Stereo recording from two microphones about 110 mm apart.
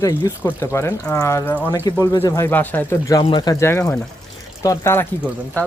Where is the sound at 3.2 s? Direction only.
40° left (ahead or behind).